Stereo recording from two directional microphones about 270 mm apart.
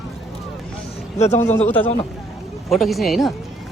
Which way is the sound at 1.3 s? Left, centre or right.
Left.